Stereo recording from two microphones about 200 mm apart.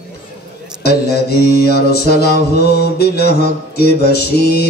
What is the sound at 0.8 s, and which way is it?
Mantra, 55° left (ahead or behind).